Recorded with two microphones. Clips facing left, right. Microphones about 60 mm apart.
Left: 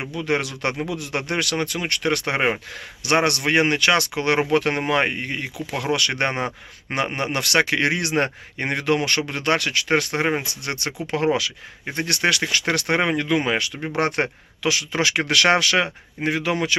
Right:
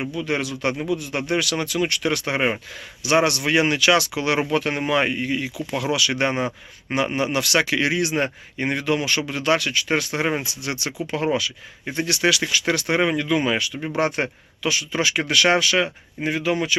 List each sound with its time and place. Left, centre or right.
0.0 s speech: left
7.1 s speech: left
7.3 s speech: left
9.2 s speech: left
11.9 s speech: left